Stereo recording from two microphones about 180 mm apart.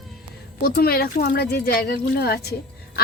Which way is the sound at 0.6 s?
55° left (ahead or behind).